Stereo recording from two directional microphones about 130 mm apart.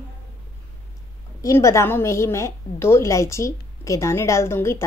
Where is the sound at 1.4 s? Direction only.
25° left (ahead or behind).